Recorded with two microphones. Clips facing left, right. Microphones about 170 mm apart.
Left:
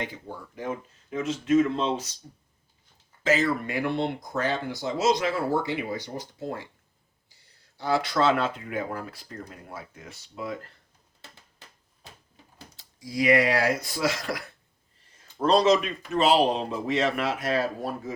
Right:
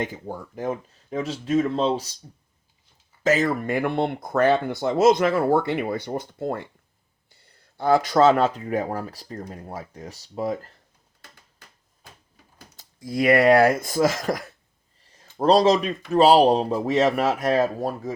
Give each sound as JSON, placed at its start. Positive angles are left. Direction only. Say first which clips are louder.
{"t": 0.0, "sound": "speech", "louder": "right 5 dB", "side_deg": -45}
{"t": 3.2, "sound": "speech", "louder": "right 3 dB", "side_deg": -45}
{"t": 12.7, "sound": "speech", "louder": "right 4 dB", "side_deg": -55}